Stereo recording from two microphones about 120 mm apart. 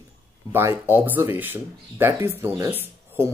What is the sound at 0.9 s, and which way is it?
Speech, 15° right (ahead or behind).